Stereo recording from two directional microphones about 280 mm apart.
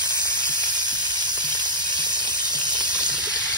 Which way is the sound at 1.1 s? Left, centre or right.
Centre.